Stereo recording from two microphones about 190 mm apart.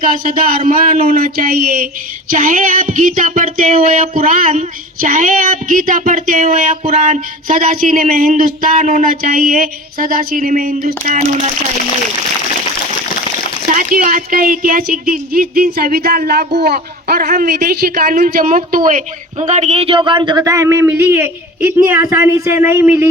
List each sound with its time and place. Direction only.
0.0 s speech: 45° right (ahead or behind)
13.7 s speech: 45° right (ahead or behind); by 23.0 s 10° right (ahead or behind)